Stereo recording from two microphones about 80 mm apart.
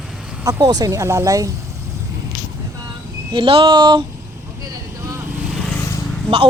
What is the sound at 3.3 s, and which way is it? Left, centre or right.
Speech, right.